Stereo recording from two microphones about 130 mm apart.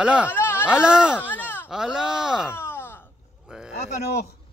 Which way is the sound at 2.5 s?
15° left (ahead or behind).